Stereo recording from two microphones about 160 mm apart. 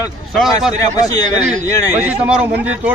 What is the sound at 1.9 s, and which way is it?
Speech, 10° right (ahead or behind).